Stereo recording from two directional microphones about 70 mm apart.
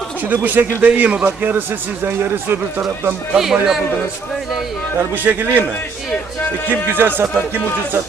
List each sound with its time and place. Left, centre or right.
0.3 s speech: right
3.3 s speech: centre
5.2 s speech: right
6.7 s speech: right